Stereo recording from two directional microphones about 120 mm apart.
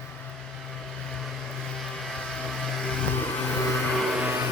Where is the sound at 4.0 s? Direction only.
10° right (ahead or behind).